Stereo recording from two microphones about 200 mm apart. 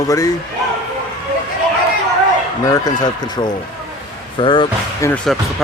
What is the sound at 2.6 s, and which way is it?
Speech, 20° left (ahead or behind).